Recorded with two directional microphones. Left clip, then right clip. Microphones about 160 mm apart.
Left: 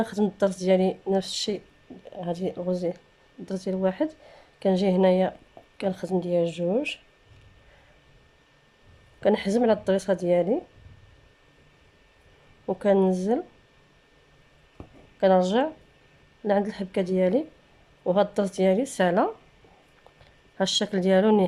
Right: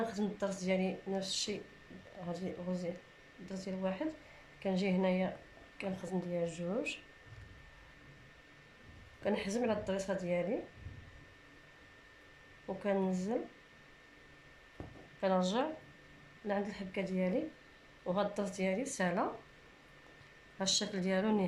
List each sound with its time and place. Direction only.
0.0 s speech: 55° left (ahead or behind)
9.2 s speech: 55° left (ahead or behind)
12.6 s speech: 55° left (ahead or behind)
15.2 s speech: 55° left (ahead or behind)
20.6 s speech: 50° left (ahead or behind)